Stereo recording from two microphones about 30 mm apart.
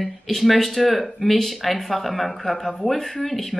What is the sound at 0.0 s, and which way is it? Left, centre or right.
Speech, centre.